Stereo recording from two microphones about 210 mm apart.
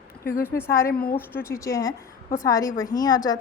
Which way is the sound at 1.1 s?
10° left (ahead or behind).